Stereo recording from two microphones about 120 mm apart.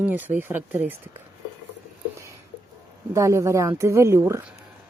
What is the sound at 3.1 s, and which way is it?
Speech, 25° right (ahead or behind).